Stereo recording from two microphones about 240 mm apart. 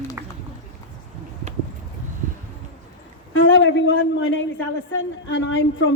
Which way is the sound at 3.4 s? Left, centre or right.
Left.